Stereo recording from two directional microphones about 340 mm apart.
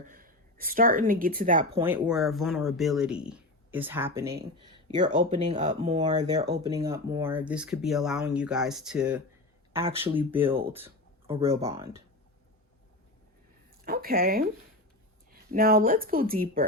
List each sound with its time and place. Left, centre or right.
0.0 s speech: right
1.8 s speech: centre
10.7 s a sound: centre
11.3 s speech: centre
13.8 s speech: right